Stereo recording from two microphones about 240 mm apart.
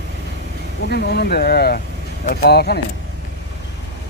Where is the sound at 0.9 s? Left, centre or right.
Left.